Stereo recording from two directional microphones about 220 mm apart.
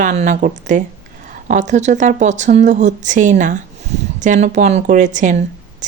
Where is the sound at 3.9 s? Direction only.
30° right (ahead or behind).